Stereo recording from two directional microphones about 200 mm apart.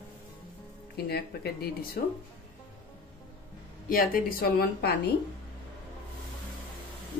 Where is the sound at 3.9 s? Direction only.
45° left (ahead or behind).